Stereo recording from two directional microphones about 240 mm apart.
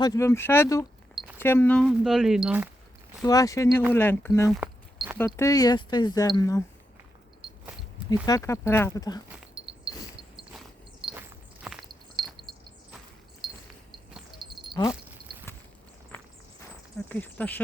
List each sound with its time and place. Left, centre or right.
0.0 s speech: centre
3.2 s speech: centre
8.1 s speech: centre
9.6 s a sound: right
11.1 s walk: centre
14.4 s a sound: centre
17.1 s speech: centre